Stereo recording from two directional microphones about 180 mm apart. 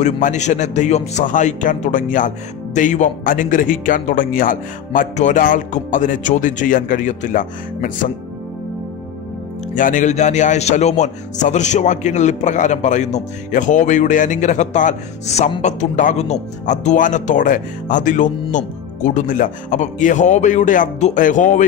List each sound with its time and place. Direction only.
0.0 s a man's voice: 40° left (ahead or behind)
9.8 s a man's voice: 45° left (ahead or behind)